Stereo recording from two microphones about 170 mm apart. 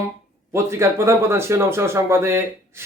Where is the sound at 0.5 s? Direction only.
15° right (ahead or behind).